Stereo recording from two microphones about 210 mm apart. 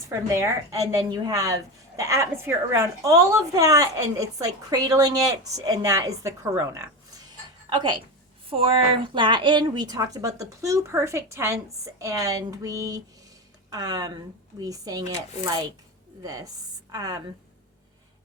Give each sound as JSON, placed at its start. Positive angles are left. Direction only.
{"t": 0.1, "sound": "a woman's voice", "side_deg": -15}